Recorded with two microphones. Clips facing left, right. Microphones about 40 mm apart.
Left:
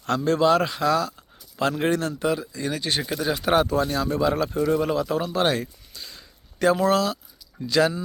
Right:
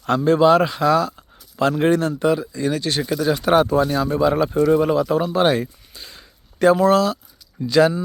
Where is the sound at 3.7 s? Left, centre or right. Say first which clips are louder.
Right 5 dB; centre.